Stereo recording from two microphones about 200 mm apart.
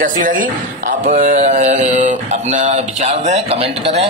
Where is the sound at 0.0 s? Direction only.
40° right (ahead or behind).